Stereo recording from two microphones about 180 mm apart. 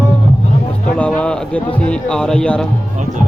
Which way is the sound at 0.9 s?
5° left (ahead or behind).